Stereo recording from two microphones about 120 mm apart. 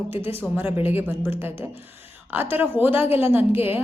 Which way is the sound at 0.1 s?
20° right (ahead or behind).